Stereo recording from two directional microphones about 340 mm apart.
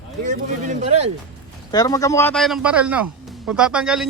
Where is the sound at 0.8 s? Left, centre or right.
Centre.